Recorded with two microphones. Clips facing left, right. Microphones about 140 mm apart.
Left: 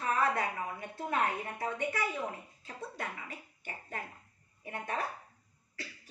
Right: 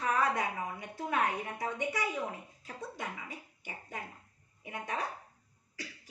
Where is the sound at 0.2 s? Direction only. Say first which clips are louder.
Even; 15° right (ahead or behind).